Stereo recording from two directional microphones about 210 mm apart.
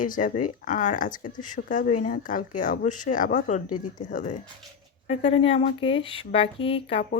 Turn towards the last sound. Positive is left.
turn(degrees=25)  # may be behind; listen again after turning